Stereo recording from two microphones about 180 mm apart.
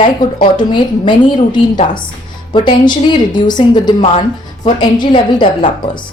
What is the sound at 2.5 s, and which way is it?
A woman's voice, 25° left (ahead or behind).